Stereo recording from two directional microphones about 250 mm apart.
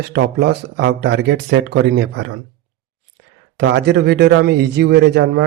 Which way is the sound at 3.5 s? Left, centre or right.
Right.